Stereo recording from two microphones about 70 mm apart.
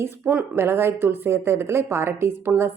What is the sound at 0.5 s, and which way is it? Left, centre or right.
Speech, right.